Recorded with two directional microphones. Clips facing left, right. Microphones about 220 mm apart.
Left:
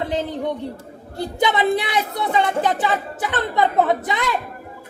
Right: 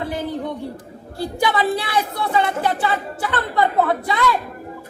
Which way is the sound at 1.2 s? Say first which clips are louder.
Left 1 dB; 20° left (ahead or behind).